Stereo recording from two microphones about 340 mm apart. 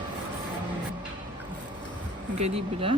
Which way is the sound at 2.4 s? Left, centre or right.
Centre.